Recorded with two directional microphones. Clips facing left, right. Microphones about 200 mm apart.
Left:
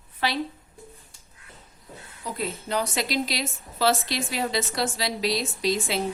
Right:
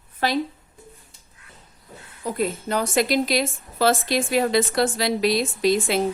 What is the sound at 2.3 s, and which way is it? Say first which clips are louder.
A woman's voice: right 6 dB; 50° right (ahead or behind).